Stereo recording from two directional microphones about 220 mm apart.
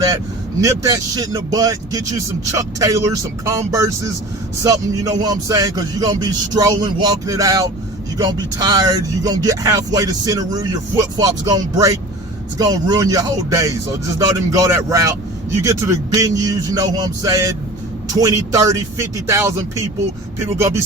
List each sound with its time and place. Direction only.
0.6 s speech: 15° right (ahead or behind)